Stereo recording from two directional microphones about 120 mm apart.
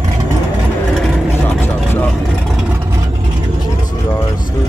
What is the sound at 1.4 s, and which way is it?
Vehicle, 15° left (ahead or behind).